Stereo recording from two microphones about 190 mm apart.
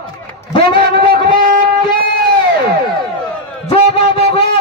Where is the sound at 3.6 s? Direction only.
30° left (ahead or behind).